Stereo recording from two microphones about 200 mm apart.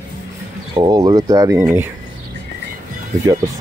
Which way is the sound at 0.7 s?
20° right (ahead or behind).